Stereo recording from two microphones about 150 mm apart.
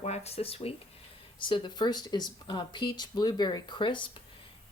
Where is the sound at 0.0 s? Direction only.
45° left (ahead or behind).